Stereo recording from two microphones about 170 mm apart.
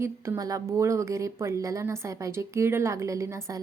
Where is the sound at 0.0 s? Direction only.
20° right (ahead or behind).